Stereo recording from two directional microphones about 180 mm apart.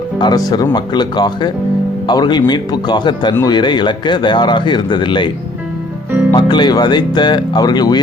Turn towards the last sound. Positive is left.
turn(degrees=25)  # may be behind; listen again after turning